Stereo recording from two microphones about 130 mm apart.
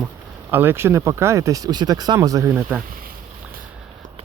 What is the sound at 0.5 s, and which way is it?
Speech, 15° right (ahead or behind).